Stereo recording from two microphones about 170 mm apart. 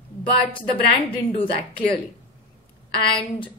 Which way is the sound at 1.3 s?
30° left (ahead or behind).